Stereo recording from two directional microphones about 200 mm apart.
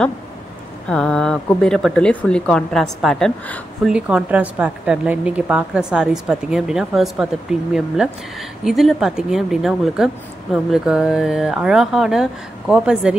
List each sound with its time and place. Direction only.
0.8 s a woman's voice: 5° left (ahead or behind)
3.9 s a woman's voice: 5° right (ahead or behind)